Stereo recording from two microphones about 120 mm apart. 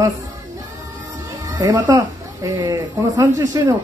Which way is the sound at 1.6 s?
25° right (ahead or behind).